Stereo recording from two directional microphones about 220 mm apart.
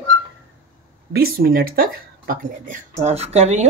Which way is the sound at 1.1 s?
45° right (ahead or behind).